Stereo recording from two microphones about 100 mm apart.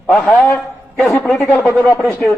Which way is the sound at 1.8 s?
20° left (ahead or behind).